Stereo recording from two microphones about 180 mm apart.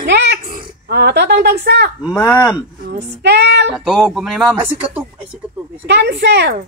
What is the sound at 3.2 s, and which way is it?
Speech, 70° right (ahead or behind).